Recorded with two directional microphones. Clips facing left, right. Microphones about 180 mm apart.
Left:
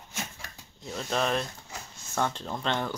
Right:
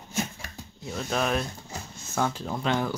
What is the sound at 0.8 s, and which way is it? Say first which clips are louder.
Speech: right 1 dB; 5° right (ahead or behind).